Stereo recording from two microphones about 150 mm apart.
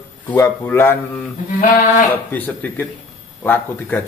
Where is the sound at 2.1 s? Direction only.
10° left (ahead or behind).